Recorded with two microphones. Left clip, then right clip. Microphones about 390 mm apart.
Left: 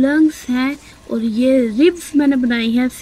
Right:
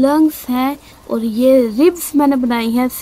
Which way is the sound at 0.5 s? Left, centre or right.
Centre.